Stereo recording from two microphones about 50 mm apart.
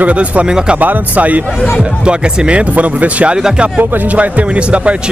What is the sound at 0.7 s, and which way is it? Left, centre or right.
Speech, right.